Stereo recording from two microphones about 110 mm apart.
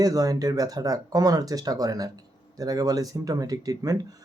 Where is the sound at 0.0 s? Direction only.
35° right (ahead or behind).